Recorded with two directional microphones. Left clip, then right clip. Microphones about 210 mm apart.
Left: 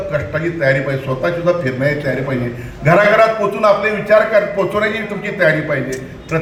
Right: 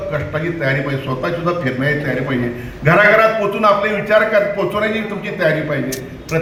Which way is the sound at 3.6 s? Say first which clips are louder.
Left 3 dB; 30° left (ahead or behind).